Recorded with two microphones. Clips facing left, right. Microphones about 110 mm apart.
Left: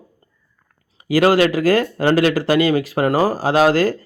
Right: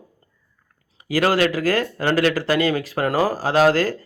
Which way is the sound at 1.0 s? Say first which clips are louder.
Left 5 dB; 15° left (ahead or behind).